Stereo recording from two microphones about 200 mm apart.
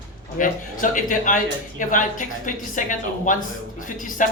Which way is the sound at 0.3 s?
40° left (ahead or behind).